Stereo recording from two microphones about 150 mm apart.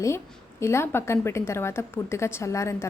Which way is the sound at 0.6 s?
15° left (ahead or behind).